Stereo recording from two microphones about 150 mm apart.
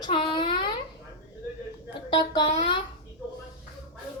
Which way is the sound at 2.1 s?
30° left (ahead or behind).